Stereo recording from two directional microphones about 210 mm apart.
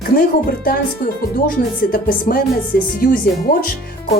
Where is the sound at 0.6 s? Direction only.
45° left (ahead or behind).